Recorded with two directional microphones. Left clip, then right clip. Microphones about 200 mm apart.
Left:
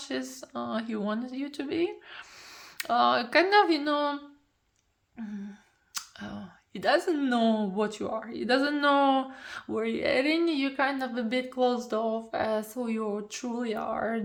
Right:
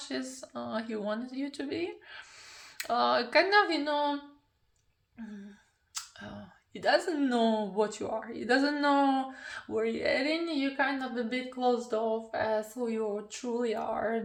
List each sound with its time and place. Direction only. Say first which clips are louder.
0.0 s speech: left 3 dB; 45° left (ahead or behind)
5.9 s a sound: left 3 dB; 50° left (ahead or behind)
6.7 s speech: left 2 dB; 45° left (ahead or behind)